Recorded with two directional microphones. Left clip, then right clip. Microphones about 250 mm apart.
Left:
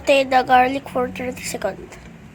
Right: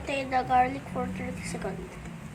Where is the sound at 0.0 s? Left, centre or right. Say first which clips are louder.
Left 13 dB; left.